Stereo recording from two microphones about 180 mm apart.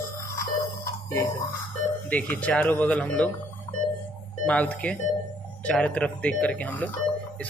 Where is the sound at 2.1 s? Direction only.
5° left (ahead or behind).